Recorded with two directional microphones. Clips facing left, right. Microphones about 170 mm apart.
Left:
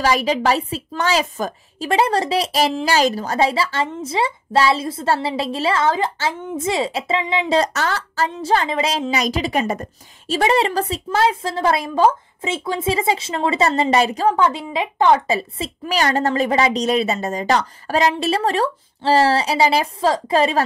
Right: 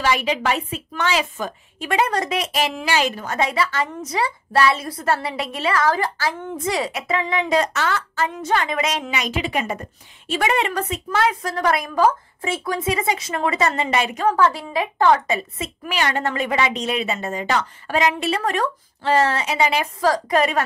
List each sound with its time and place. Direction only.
0.0 s a woman's voice: 40° left (ahead or behind); by 15.2 s 20° left (ahead or behind)
15.2 s a woman's voice: 30° left (ahead or behind)